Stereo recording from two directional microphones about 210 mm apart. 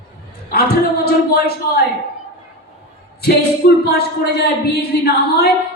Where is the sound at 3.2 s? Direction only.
50° left (ahead or behind).